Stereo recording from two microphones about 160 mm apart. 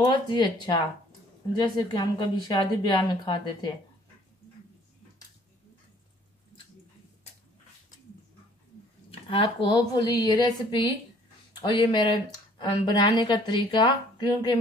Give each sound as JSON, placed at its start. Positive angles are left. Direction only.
{"t": 0.1, "sound": "speech", "side_deg": 30}
{"t": 9.3, "sound": "speech", "side_deg": 30}